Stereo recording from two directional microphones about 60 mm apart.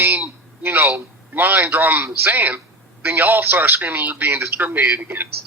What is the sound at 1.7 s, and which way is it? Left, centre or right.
A man's voice, right.